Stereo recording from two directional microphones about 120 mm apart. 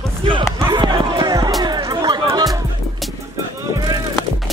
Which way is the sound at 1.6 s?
35° right (ahead or behind).